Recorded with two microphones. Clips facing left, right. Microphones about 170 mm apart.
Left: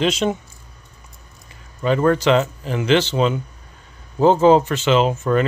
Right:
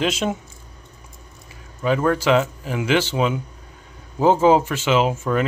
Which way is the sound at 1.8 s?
5° right (ahead or behind).